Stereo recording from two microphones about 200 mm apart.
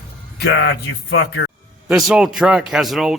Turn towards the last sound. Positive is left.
turn(degrees=0)  # may be behind; listen again after turning